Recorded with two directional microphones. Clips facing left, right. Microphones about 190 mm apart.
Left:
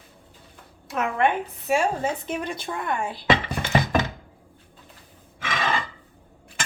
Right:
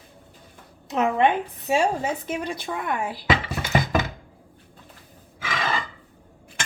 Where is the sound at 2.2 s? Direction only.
Centre (ahead or behind).